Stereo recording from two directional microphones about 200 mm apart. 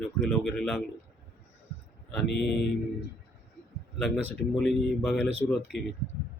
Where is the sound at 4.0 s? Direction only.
Centre (ahead or behind).